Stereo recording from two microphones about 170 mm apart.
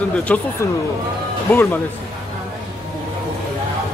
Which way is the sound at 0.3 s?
10° left (ahead or behind).